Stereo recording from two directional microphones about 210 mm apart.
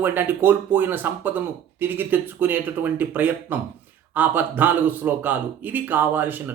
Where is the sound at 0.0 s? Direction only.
10° right (ahead or behind).